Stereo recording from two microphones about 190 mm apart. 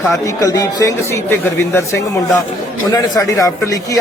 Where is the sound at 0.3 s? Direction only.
15° left (ahead or behind).